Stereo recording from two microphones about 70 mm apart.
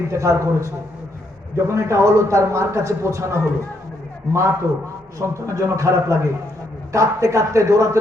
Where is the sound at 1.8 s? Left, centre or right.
Right.